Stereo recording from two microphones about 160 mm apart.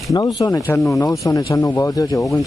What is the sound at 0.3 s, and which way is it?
Speech, 25° left (ahead or behind).